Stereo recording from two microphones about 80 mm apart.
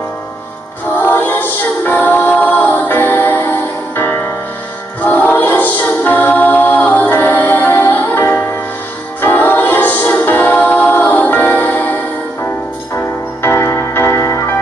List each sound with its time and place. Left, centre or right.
0.9 s music: left
12.9 s music: left